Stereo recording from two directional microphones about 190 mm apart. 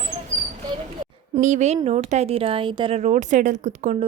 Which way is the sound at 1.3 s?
40° right (ahead or behind).